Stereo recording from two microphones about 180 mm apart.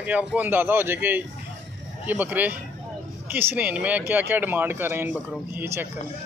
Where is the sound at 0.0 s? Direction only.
10° right (ahead or behind).